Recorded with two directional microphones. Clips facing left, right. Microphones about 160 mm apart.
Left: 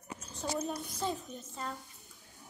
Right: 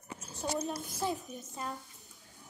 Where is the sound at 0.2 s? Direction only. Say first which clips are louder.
Right 1 dB; 5° right (ahead or behind).